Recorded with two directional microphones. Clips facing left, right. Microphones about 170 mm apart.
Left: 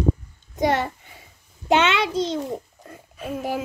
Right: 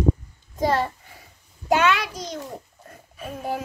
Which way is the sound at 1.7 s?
25° left (ahead or behind).